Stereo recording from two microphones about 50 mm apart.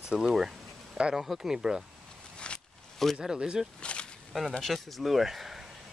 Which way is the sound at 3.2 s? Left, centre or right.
Centre.